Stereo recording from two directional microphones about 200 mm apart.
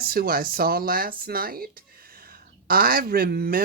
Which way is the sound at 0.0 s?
50° right (ahead or behind).